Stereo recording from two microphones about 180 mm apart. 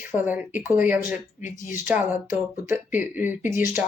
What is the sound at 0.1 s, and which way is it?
Speech, 10° right (ahead or behind).